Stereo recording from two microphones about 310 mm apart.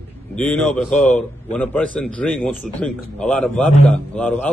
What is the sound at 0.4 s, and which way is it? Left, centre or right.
A man's voice, centre.